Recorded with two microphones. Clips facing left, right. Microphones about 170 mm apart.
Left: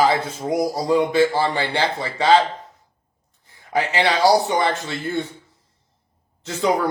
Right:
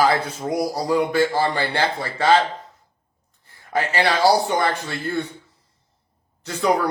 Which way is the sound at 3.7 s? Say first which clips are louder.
Left 1 dB; 15° left (ahead or behind).